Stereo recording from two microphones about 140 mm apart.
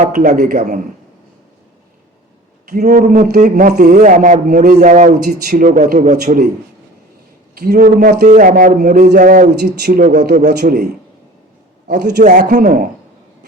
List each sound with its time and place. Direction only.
0.1 s a man's voice: 70° right (ahead or behind)
2.7 s a man's voice: 60° right (ahead or behind)
7.5 s a man's voice: 80° right; by 10.8 s 65° right (ahead or behind)
11.9 s a man's voice: 60° right (ahead or behind)